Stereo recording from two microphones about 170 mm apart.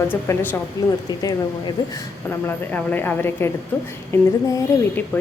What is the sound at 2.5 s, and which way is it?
Speech, 10° left (ahead or behind).